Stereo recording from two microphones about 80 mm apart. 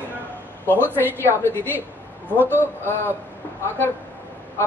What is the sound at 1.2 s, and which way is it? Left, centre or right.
Speech, left.